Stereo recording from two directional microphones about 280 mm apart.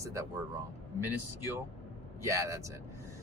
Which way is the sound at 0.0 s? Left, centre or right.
Centre.